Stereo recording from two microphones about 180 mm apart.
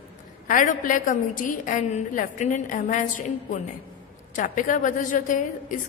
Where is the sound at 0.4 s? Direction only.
45° left (ahead or behind).